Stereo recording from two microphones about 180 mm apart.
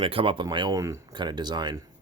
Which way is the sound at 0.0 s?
30° right (ahead or behind).